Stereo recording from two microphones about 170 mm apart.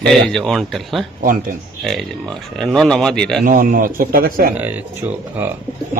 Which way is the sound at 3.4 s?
55° right (ahead or behind).